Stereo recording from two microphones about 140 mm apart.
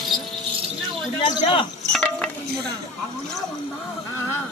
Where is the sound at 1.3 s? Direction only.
40° left (ahead or behind).